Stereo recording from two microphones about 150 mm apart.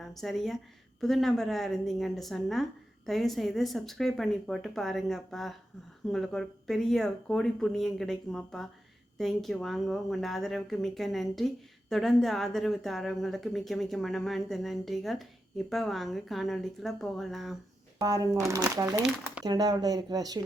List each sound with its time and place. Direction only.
0.0 s speech: centre (ahead or behind)
18.0 s speech: 25° right (ahead or behind)
19.0 s speech: 5° right (ahead or behind)
19.5 s speech: 25° right (ahead or behind)